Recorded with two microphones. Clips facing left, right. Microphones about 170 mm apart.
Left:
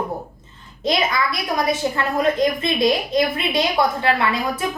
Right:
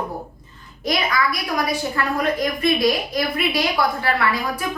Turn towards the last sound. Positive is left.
turn(degrees=25)  # may be behind; listen again after turning